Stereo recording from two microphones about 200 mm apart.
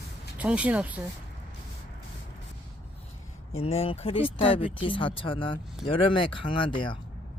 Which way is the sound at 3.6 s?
30° left (ahead or behind).